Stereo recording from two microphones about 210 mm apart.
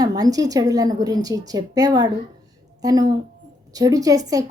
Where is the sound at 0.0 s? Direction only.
20° right (ahead or behind).